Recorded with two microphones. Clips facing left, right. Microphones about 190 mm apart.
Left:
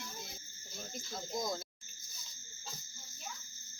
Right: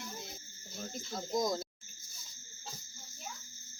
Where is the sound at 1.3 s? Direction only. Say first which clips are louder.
Right 6 dB; 45° right (ahead or behind).